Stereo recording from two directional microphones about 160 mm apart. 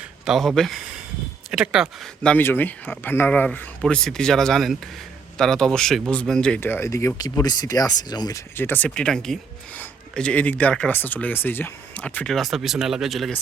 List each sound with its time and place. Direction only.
0.0 s speech: centre (ahead or behind)